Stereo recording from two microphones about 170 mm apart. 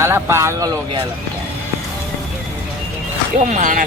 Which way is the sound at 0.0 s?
15° right (ahead or behind).